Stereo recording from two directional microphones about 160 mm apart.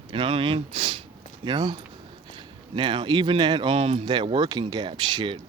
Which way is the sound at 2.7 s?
30° right (ahead or behind).